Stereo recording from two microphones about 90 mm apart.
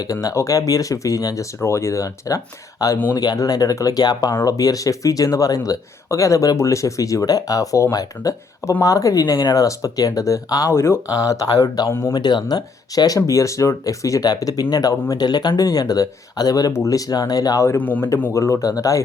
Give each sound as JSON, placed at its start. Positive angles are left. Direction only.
{"t": 0.0, "sound": "speech", "side_deg": 40}
{"t": 11.9, "sound": "speech", "side_deg": 30}
{"t": 12.1, "sound": "speech", "side_deg": 55}
{"t": 17.7, "sound": "speech", "side_deg": 20}
{"t": 18.3, "sound": "speech", "side_deg": 35}